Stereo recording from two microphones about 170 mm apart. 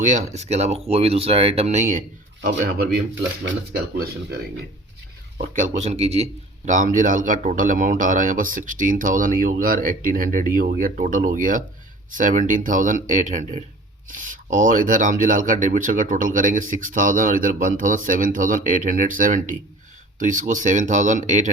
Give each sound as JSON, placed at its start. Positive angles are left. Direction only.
{"t": 0.0, "sound": "speech", "side_deg": -45}
{"t": 5.4, "sound": "speech", "side_deg": -50}
{"t": 6.7, "sound": "speech", "side_deg": -50}